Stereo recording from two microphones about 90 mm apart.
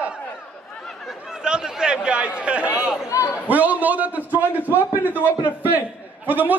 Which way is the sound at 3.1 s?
35° left (ahead or behind).